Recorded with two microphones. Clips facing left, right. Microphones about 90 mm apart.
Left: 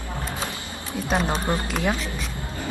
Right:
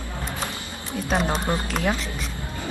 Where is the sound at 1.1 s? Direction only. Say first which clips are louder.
Even; centre (ahead or behind).